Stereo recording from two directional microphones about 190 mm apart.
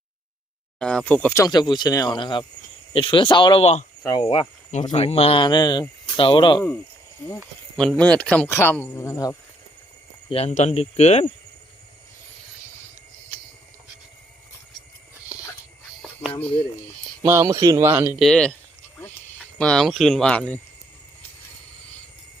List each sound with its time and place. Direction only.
0.8 s speech: 5° left (ahead or behind); by 3.8 s 35° left (ahead or behind)
4.0 s speech: 20° left (ahead or behind)
7.8 s speech: 5° left (ahead or behind)
10.2 s speech: 35° left (ahead or behind)
17.2 s speech: 15° right (ahead or behind)
18.2 s speech: 5° left (ahead or behind)